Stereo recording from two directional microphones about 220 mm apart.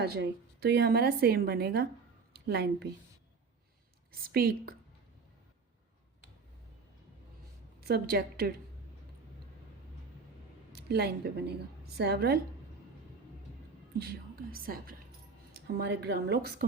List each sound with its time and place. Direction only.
0.0 s a woman's voice: 45° right (ahead or behind)
4.1 s speech: 45° right (ahead or behind)
7.8 s speech: 45° right (ahead or behind)
10.7 s a woman's voice: 45° right (ahead or behind)
14.0 s speech: 45° right (ahead or behind)